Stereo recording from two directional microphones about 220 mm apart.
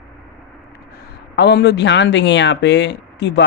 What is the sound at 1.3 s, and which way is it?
Speech, 50° left (ahead or behind).